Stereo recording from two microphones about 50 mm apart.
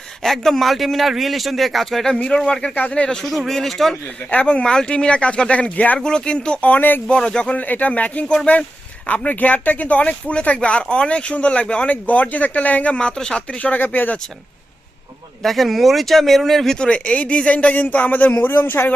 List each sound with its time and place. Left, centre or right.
0.2 s a man's voice: centre
2.1 s speech: centre
3.2 s a man's voice: centre
4.3 s speech: left
6.0 s speech: centre; by 7.0 s left
7.2 s speech: centre
7.5 s speech: left
11.9 s speech: left
13.7 s speech: left
15.4 s a man's voice: centre
16.7 s speech: centre; by 18.9 s left